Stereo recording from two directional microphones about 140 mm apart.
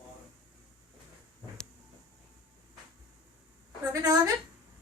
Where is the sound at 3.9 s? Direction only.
25° right (ahead or behind).